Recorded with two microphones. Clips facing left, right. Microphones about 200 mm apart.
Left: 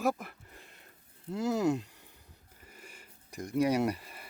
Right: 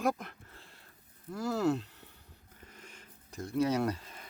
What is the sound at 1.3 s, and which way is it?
Speech, 20° left (ahead or behind).